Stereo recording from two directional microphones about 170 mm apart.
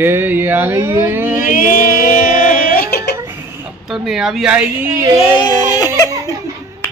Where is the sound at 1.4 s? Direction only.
55° left (ahead or behind).